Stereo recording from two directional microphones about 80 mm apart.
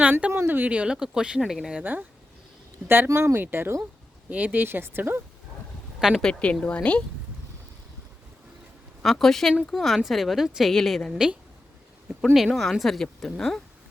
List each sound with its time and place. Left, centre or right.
0.0 s speech: centre
0.3 s speech: right; by 1.5 s centre
1.8 s speech: right
6.0 s speech: centre
6.2 s a woman's voice: centre
9.0 s a woman's voice: centre
12.7 s a woman's voice: centre